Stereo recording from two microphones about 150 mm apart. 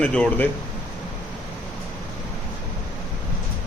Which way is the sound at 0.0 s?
5° left (ahead or behind).